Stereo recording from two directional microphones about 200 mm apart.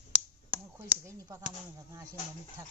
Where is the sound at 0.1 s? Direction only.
5° right (ahead or behind).